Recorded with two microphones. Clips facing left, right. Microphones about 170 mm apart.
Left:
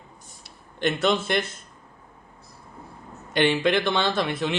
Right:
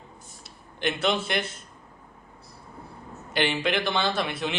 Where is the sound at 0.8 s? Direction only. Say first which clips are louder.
Left 3 dB; 45° left (ahead or behind).